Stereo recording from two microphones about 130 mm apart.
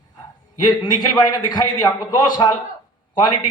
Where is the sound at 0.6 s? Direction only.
30° left (ahead or behind).